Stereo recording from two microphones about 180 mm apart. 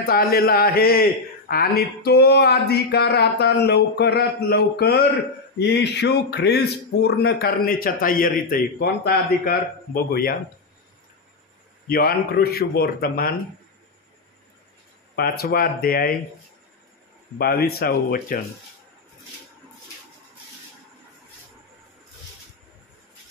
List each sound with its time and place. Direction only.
0.0 s a man's voice: 55° left (ahead or behind)
11.9 s a man's voice: 55° left (ahead or behind)
15.1 s a man's voice: 60° left (ahead or behind)
17.4 s a man's voice: 60° left (ahead or behind)